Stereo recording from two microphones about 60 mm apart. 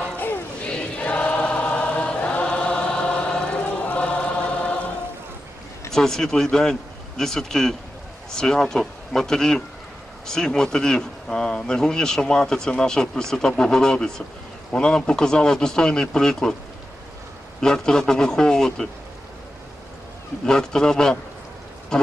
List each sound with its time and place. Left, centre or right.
0.7 s choir: centre
5.9 s speech: centre
17.6 s speech: centre
20.4 s speech: centre
21.9 s goat: centre